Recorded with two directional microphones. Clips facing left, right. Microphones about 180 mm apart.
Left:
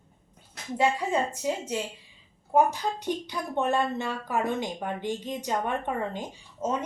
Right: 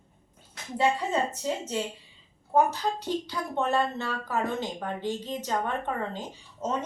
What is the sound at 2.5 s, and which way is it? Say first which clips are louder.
Speech: left 1 dB; 15° left (ahead or behind).